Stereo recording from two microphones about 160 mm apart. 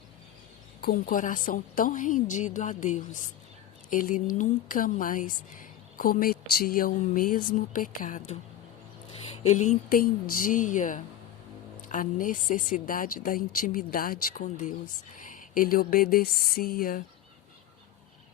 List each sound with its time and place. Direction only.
0.8 s speech: 60° left (ahead or behind)
9.2 s speech: 45° left (ahead or behind); by 17.0 s 65° left (ahead or behind)